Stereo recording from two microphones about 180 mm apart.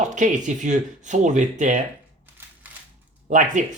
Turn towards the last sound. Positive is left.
turn(degrees=-45)  # may be behind; listen again after turning